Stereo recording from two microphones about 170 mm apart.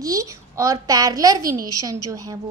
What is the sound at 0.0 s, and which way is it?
A woman's voice, 20° right (ahead or behind).